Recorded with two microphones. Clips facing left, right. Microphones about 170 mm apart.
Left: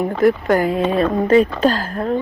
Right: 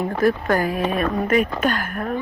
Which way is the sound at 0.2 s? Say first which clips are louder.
Left 4 dB; 20° left (ahead or behind).